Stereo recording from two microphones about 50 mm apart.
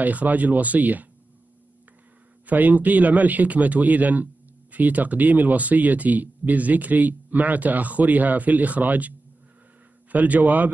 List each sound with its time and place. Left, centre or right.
0.0 s speech: right
2.4 s speech: right
10.1 s speech: right